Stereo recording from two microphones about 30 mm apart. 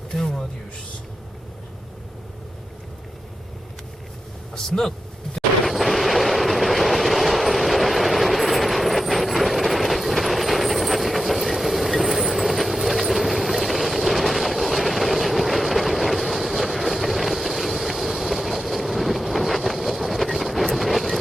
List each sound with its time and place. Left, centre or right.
0.1 s a sound: centre
4.5 s vehicle: centre
5.6 s train: centre